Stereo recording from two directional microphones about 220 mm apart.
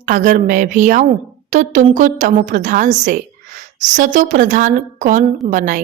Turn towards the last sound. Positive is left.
turn(degrees=-35)  # may be behind; listen again after turning